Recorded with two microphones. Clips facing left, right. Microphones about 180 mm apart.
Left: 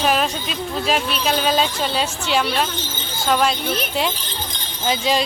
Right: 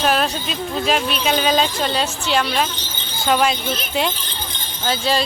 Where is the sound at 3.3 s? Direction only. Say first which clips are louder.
Right 1 dB; centre (ahead or behind).